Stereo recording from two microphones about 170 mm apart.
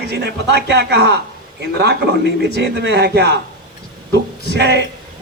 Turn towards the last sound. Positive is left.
turn(degrees=-80)